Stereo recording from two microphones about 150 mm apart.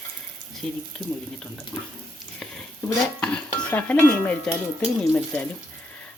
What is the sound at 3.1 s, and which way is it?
Speech, 10° left (ahead or behind).